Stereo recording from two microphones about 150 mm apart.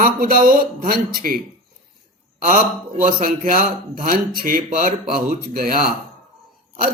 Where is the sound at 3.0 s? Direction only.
55° right (ahead or behind).